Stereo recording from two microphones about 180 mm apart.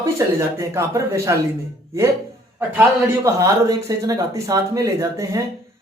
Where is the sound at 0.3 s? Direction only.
15° right (ahead or behind).